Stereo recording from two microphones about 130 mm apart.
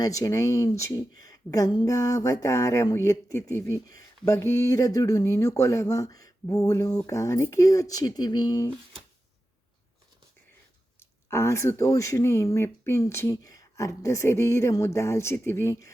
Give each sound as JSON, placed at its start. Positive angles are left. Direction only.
{"t": 0.0, "sound": "speech", "side_deg": 25}
{"t": 11.3, "sound": "speech", "side_deg": 20}